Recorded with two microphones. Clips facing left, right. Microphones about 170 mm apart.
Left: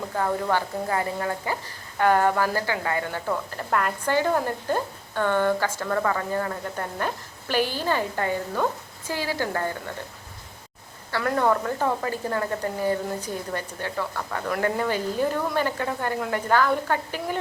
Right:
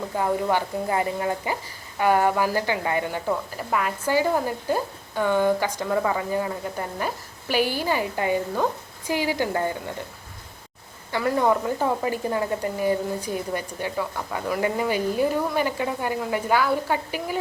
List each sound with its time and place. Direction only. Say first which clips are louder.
0.2 s speech: right 1 dB; 15° right (ahead or behind)
11.2 s speech: right 1 dB; 10° right (ahead or behind)